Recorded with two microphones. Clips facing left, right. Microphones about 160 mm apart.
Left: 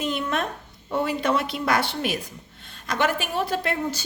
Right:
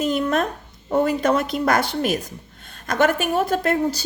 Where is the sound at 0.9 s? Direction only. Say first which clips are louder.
Right 5 dB; 45° right (ahead or behind).